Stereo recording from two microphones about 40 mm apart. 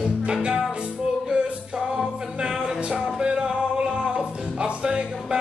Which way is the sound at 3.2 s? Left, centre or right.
Right.